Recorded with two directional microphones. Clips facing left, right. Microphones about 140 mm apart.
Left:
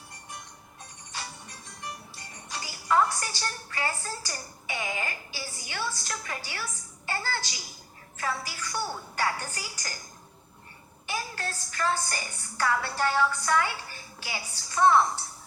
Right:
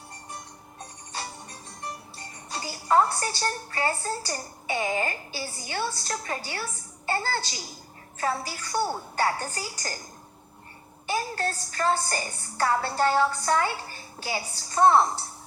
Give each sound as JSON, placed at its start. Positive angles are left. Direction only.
{"t": 1.1, "sound": "a woman's voice", "side_deg": -35}
{"t": 11.0, "sound": "a woman's voice", "side_deg": -40}